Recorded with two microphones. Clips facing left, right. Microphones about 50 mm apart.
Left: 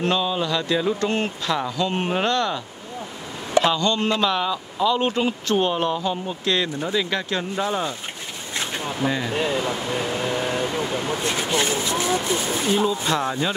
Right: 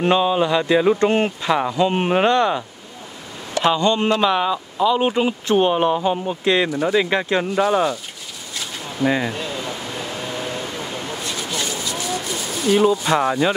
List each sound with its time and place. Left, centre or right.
0.0 s speech: right
3.6 s speech: centre
7.6 s speech: right
8.5 s a sound: left
9.0 s speech: right
9.3 s a sound: left
13.0 s speech: right